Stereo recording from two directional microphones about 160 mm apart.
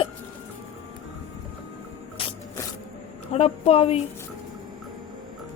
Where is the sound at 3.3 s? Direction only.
40° left (ahead or behind).